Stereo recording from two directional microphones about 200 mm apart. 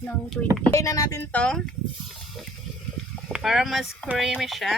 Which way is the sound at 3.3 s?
Centre (ahead or behind).